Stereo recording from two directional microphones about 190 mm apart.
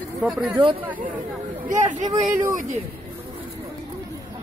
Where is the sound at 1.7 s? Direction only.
40° right (ahead or behind).